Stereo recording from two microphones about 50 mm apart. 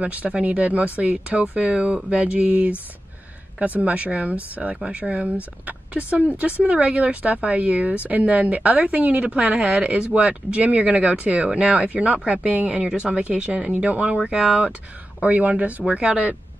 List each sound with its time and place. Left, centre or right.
0.0 s a woman's voice: right
15.2 s a woman's voice: right